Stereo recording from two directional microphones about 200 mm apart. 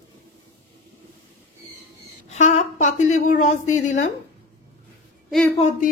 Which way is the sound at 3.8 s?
35° left (ahead or behind).